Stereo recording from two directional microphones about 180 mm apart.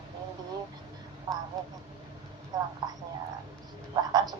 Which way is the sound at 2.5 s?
20° right (ahead or behind).